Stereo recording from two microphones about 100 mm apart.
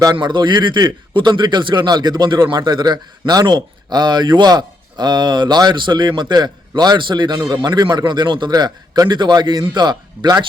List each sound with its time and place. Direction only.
0.0 s a man's voice: 45° right (ahead or behind)
7.3 s a man's voice: 35° right (ahead or behind)